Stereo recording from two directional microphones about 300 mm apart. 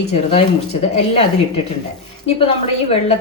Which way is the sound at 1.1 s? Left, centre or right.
Left.